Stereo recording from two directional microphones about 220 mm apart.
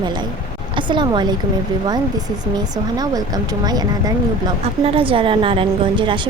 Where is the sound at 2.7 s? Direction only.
15° right (ahead or behind).